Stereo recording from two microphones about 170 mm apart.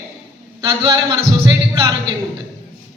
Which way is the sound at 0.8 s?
20° right (ahead or behind).